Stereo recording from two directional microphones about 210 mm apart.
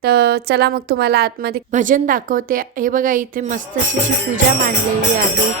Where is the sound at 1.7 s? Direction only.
35° right (ahead or behind).